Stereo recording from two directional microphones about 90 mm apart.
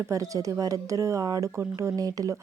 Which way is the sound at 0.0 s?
35° right (ahead or behind).